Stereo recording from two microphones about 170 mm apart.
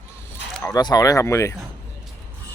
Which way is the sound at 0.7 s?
25° left (ahead or behind).